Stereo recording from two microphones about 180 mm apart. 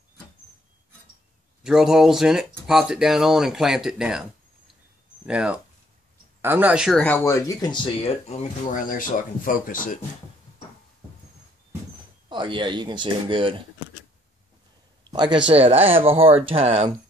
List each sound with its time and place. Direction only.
1.6 s speech: 5° right (ahead or behind); by 9.9 s 50° left (ahead or behind)
12.3 s speech: 25° right (ahead or behind)
15.0 s speech: 25° right (ahead or behind)